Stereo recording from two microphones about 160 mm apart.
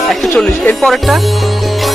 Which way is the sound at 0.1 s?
Centre (ahead or behind).